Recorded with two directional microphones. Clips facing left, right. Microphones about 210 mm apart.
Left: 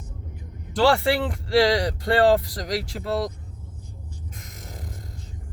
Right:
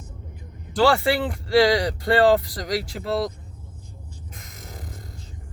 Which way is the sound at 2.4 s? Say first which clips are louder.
Right 1 dB; 40° left (ahead or behind).